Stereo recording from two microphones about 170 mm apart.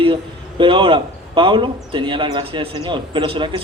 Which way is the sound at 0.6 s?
30° right (ahead or behind).